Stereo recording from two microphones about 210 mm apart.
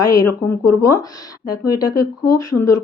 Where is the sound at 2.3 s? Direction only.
15° left (ahead or behind).